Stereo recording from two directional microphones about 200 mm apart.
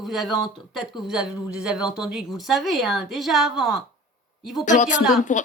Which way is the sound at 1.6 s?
5° right (ahead or behind).